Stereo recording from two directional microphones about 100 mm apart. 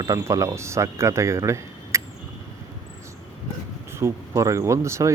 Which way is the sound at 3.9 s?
30° right (ahead or behind).